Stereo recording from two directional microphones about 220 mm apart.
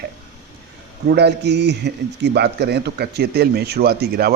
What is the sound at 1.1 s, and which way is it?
Speech, 50° right (ahead or behind).